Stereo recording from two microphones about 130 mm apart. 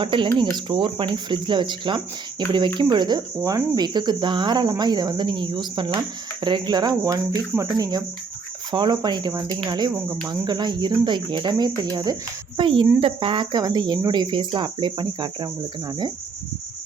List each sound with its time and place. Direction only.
0.0 s cricket: 40° right (ahead or behind)